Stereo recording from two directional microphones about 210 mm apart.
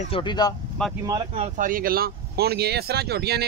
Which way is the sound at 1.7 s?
45° right (ahead or behind).